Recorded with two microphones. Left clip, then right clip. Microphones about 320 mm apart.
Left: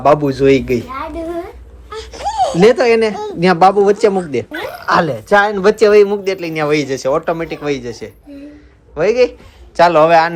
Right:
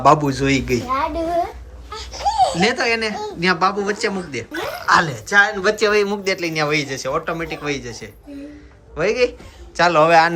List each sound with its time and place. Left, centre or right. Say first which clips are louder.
0.0 s speech: left 4 dB; centre
1.9 s a sound: even; left
2.6 s speech: left 8 dB; centre